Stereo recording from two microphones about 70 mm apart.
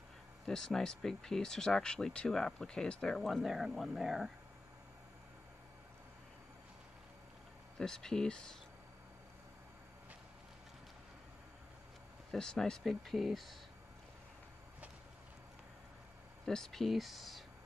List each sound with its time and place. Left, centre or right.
0.5 s speech: centre
7.8 s speech: centre
12.3 s speech: centre
16.4 s speech: centre